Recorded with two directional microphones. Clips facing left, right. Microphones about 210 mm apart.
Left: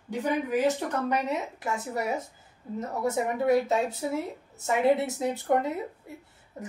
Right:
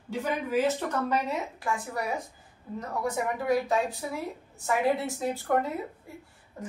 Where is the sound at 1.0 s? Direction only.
20° left (ahead or behind).